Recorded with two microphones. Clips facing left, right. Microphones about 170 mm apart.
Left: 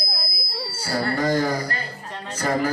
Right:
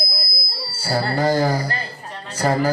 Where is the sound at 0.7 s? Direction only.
30° right (ahead or behind).